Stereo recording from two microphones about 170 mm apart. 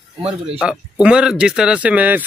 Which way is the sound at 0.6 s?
5° right (ahead or behind).